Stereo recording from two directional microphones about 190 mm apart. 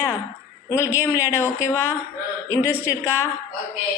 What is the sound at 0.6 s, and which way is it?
A woman's voice, 15° left (ahead or behind).